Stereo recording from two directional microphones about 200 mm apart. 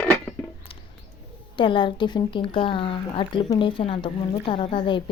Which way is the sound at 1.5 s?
25° left (ahead or behind).